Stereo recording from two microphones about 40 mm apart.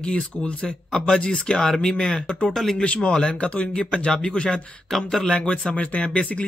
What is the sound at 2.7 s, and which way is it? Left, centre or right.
Speech, left.